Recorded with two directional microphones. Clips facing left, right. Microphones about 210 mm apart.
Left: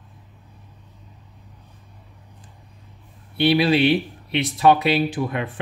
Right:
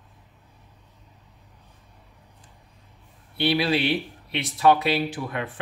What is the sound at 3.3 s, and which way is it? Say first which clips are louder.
Speech: left 5 dB; 20° left (ahead or behind).